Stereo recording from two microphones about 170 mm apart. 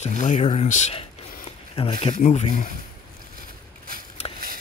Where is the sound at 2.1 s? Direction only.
45° left (ahead or behind).